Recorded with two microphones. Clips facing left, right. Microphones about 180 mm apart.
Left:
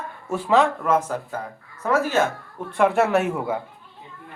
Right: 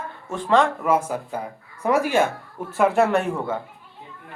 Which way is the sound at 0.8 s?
10° right (ahead or behind).